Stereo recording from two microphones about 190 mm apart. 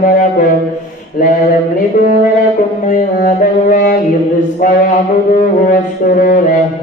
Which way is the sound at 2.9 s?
45° left (ahead or behind).